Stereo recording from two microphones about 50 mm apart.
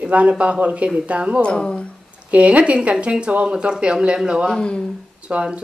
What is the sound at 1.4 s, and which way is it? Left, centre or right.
Speech, centre.